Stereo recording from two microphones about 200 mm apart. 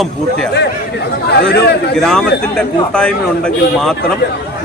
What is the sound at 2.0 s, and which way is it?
A man's voice, centre (ahead or behind).